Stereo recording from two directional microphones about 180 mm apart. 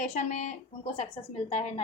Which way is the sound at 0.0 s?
40° left (ahead or behind).